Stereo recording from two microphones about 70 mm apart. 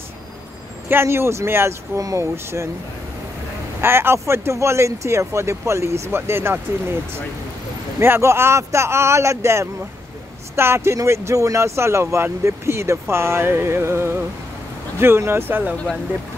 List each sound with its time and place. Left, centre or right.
0.8 s speech: right
2.0 s speech: right
2.3 s speech: right
3.8 s speech: right
8.0 s speech: right